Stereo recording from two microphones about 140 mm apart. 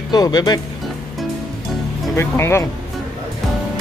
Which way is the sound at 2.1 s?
15° left (ahead or behind).